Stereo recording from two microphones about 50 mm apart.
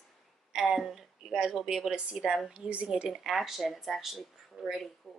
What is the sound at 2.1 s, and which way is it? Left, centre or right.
Speech, centre.